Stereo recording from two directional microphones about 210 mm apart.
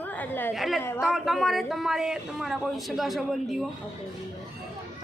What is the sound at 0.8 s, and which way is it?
Speech, 10° left (ahead or behind).